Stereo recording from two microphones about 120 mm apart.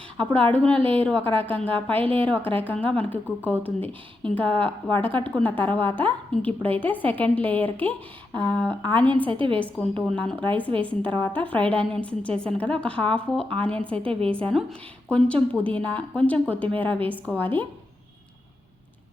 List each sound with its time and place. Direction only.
0.5 s a woman's voice: 10° left (ahead or behind)
9.3 s a woman's voice: 45° right (ahead or behind)
9.8 s a woman's voice: 15° left (ahead or behind)